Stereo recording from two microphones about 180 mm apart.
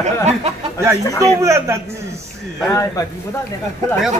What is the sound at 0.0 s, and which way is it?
Speech, 35° right (ahead or behind).